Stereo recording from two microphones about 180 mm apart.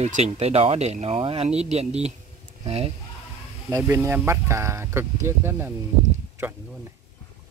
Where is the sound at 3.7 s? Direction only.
15° right (ahead or behind).